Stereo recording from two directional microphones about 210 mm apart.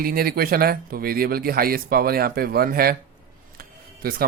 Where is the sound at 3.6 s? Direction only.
45° right (ahead or behind).